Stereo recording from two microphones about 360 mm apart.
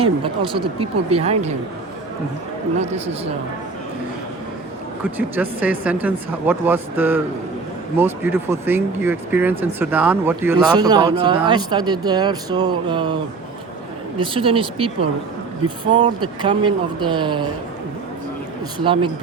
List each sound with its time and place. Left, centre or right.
0.0 s speech: centre
2.7 s speech: centre
5.1 s speech: centre
14.2 s speech: centre
18.9 s speech: centre